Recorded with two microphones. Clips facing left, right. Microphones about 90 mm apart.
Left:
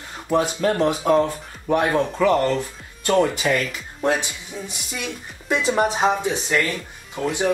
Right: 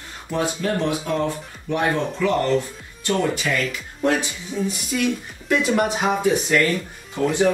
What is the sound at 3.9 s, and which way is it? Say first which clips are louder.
Speech: right 1 dB; 20° left (ahead or behind).